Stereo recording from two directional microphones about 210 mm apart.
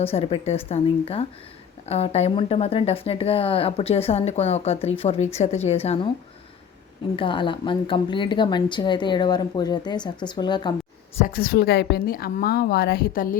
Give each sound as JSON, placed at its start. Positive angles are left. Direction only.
{"t": 0.0, "sound": "speech", "side_deg": 30}
{"t": 7.2, "sound": "speech", "side_deg": 25}
{"t": 11.2, "sound": "a woman's voice", "side_deg": 45}